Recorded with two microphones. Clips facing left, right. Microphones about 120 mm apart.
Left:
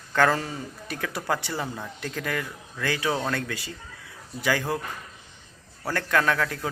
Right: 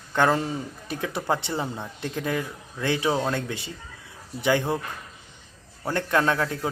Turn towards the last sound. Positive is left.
turn(degrees=-25)  # may be behind; listen again after turning